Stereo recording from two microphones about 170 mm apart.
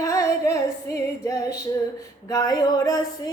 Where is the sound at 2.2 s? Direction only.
20° left (ahead or behind).